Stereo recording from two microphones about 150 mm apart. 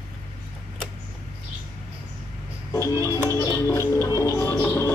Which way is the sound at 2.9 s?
20° right (ahead or behind).